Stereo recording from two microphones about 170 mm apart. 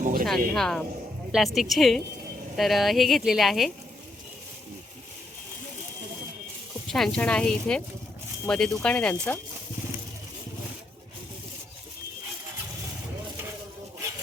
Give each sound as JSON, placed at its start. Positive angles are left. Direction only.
{"t": 0.0, "sound": "a sound", "side_deg": -55}
{"t": 0.3, "sound": "speech", "side_deg": 5}
{"t": 6.8, "sound": "speech", "side_deg": 0}